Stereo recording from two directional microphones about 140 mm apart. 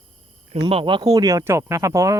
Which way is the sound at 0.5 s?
40° right (ahead or behind).